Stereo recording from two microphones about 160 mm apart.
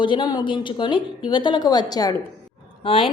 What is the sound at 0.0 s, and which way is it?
Speech, 30° left (ahead or behind).